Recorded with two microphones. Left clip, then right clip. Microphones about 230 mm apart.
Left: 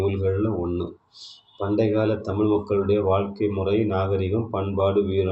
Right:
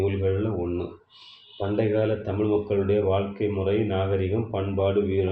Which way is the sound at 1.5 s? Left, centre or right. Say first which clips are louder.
Left 2 dB; left.